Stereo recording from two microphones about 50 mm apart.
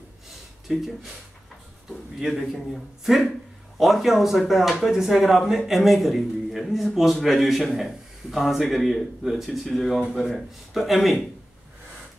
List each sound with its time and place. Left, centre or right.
0.7 s speech: centre
2.1 s speech: centre